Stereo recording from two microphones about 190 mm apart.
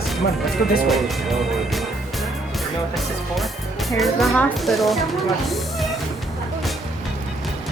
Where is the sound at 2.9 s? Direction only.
Centre (ahead or behind).